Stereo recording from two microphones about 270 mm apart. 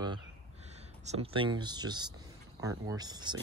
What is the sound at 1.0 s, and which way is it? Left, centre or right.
Speech, right.